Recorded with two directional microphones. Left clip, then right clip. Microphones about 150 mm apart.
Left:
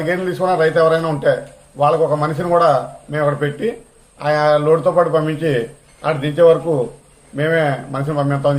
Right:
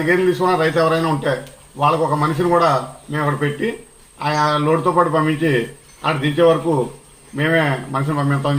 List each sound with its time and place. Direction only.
0.1 s a man's voice: 25° left (ahead or behind)